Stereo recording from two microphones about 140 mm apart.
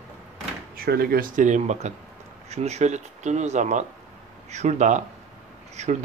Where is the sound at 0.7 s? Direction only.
90° right.